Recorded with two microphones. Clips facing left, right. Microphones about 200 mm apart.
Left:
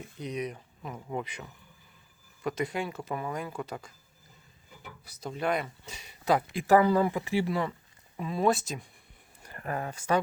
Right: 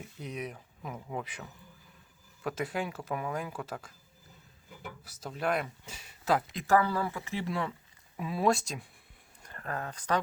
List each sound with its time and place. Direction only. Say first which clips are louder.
0.2 s speech: left 5 dB; 5° right (ahead or behind)
5.0 s speech: left 2 dB; 5° right (ahead or behind)
6.6 s speech: left 7 dB; 15° left (ahead or behind)
7.4 s speech: left 3 dB; 5° left (ahead or behind)